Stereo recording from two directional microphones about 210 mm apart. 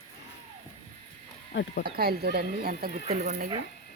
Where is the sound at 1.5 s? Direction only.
55° left (ahead or behind).